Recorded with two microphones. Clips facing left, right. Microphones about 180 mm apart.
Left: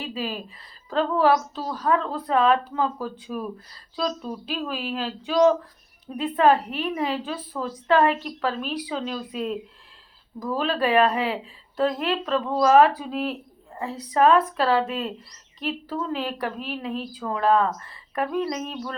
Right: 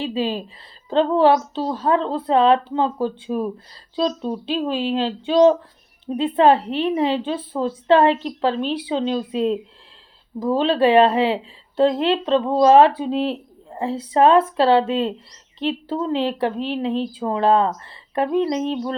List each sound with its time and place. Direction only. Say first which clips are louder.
0.0 s a woman's voice: right 7 dB; 30° right (ahead or behind)